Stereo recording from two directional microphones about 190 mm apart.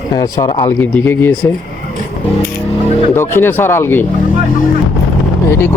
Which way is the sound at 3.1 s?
10° left (ahead or behind).